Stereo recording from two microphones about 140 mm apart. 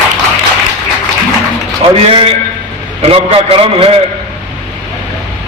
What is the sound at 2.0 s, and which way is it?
A man's voice, 40° right (ahead or behind).